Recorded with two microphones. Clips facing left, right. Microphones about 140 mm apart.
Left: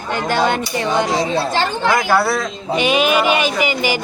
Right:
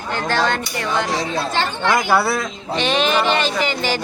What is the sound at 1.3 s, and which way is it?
Speech, 30° left (ahead or behind).